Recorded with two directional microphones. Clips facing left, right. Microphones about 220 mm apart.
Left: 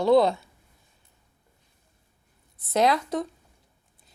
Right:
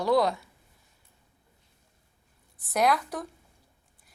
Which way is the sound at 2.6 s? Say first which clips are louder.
Left 3 dB; 25° left (ahead or behind).